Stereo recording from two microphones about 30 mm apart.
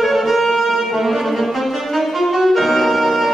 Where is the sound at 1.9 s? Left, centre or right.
Centre.